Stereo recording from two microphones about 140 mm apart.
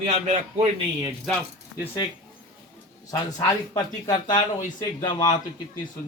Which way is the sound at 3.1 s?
25° left (ahead or behind).